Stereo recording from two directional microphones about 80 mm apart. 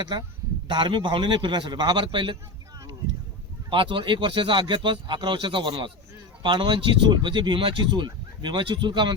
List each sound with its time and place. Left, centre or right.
0.0 s a man's voice: right
0.7 s a man's voice: right
3.7 s speech: right